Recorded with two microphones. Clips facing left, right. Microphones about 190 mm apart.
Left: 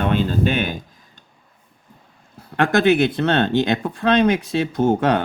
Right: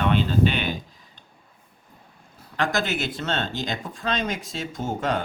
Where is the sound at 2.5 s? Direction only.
55° left (ahead or behind).